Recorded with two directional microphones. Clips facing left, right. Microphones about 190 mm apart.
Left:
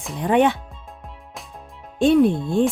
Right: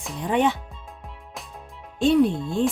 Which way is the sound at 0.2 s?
60° left (ahead or behind).